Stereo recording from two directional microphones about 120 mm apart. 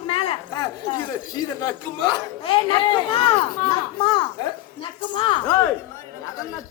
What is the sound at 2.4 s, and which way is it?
Speech, 45° left (ahead or behind).